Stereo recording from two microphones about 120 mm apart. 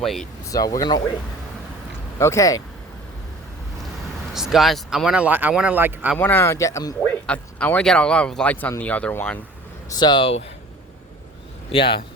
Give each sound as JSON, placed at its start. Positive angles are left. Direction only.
{"t": 0.0, "sound": "speech", "side_deg": 0}
{"t": 0.4, "sound": "speech", "side_deg": 30}
{"t": 2.1, "sound": "speech", "side_deg": 25}
{"t": 4.4, "sound": "speech", "side_deg": -5}
{"t": 6.1, "sound": "speech", "side_deg": 15}
{"t": 7.1, "sound": "speech", "side_deg": 15}
{"t": 10.0, "sound": "speech", "side_deg": 40}
{"t": 11.7, "sound": "speech", "side_deg": 45}